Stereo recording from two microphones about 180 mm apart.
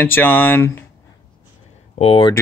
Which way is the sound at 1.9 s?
30° left (ahead or behind).